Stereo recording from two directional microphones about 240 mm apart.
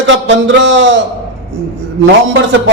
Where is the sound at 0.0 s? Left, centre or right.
Right.